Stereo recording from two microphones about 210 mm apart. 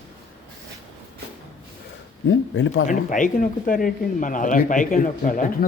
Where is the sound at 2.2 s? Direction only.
65° left (ahead or behind).